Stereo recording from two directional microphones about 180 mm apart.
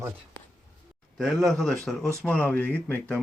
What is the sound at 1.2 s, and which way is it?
Speech, centre (ahead or behind).